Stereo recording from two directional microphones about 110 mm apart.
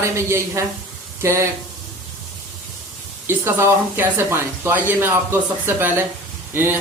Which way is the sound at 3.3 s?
20° right (ahead or behind).